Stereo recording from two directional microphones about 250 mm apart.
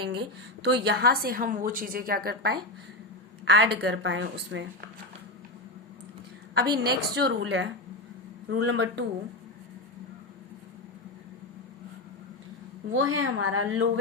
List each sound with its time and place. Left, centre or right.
0.6 s a woman's voice: right
6.5 s a woman's voice: right
12.9 s a woman's voice: right